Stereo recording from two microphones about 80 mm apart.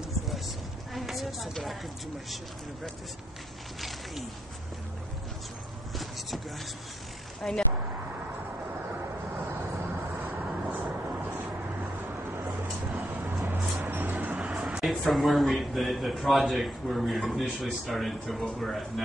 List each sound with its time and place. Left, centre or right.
0.9 s a sound: centre
7.4 s speech: centre
10.4 s vehicle: centre
13.5 s music: right
14.9 s speech: centre